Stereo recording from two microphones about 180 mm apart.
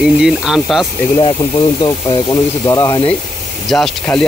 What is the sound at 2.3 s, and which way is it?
Speech, 20° left (ahead or behind).